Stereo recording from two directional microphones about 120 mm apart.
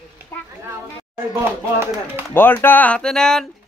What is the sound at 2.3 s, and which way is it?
Speech, 20° left (ahead or behind).